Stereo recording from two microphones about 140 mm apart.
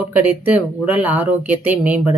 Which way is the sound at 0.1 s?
10° right (ahead or behind).